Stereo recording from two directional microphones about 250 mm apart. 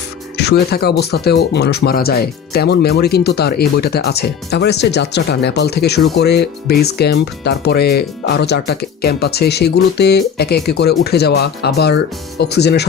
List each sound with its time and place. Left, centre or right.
0.3 s speech: left